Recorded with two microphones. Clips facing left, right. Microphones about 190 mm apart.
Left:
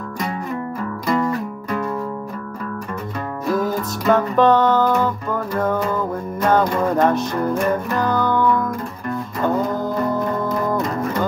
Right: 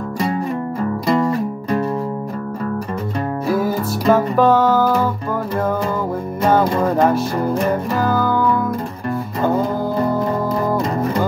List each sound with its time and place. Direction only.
1.0 s music: 30° right (ahead or behind)
3.4 s music: 10° right (ahead or behind)
6.4 s music: 10° right (ahead or behind)